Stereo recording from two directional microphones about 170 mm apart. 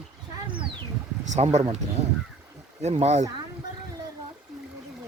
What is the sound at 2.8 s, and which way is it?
Speech, 40° right (ahead or behind).